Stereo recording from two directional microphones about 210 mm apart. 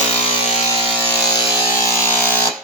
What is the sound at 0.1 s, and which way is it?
Music, 30° left (ahead or behind).